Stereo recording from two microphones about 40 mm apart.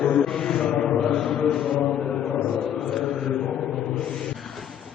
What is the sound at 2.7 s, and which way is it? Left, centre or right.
Chant, centre.